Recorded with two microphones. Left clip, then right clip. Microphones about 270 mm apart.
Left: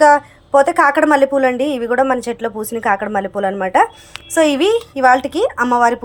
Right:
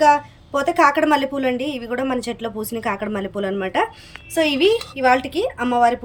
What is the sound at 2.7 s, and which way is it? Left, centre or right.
Speech, centre.